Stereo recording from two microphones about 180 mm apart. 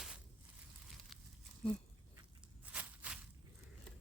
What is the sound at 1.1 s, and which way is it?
Crumpling, centre (ahead or behind).